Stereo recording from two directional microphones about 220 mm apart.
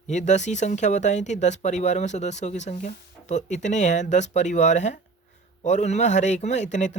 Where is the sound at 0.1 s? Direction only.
35° left (ahead or behind).